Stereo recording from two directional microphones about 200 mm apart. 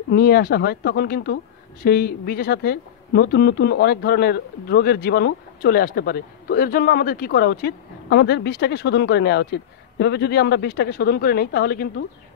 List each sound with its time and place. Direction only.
0.1 s speech: 50° left (ahead or behind)